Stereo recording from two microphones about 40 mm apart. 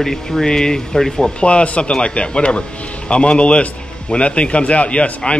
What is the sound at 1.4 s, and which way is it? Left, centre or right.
A man's voice, left.